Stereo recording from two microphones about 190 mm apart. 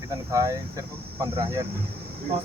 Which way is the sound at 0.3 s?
15° right (ahead or behind).